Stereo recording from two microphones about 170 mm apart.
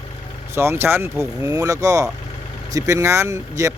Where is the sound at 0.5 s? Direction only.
15° right (ahead or behind).